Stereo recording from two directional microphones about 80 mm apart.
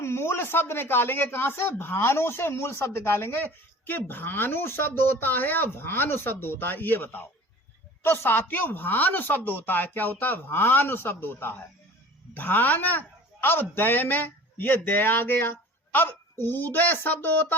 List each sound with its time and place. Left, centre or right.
0.0 s speech: left